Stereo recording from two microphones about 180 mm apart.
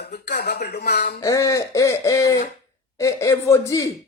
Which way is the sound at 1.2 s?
15° left (ahead or behind).